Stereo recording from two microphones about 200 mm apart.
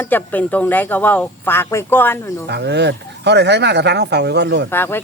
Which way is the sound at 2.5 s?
55° right (ahead or behind).